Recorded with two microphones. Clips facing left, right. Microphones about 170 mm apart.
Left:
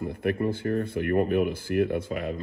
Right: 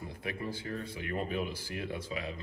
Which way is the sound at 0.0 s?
60° left (ahead or behind).